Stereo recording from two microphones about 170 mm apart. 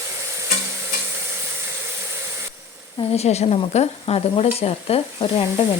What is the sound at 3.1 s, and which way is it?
Speech, 40° left (ahead or behind).